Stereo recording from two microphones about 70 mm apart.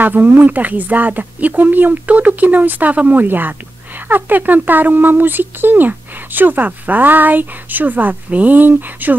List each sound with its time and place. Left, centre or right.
0.0 s speech: right